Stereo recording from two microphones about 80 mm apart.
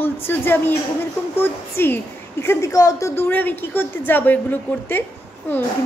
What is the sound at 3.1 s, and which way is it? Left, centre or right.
A woman's voice, left.